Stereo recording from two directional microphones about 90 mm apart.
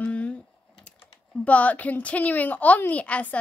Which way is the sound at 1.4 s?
15° left (ahead or behind).